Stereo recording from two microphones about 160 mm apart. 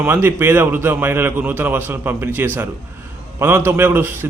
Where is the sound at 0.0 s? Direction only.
15° right (ahead or behind).